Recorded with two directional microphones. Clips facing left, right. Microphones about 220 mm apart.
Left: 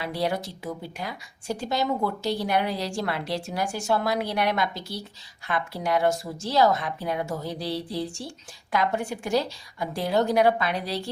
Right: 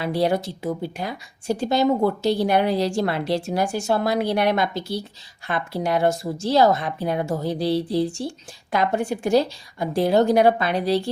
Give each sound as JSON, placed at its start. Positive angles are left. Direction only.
{"t": 0.0, "sound": "speech", "side_deg": -30}